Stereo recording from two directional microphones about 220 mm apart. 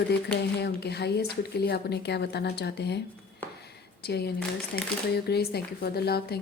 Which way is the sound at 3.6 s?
45° left (ahead or behind).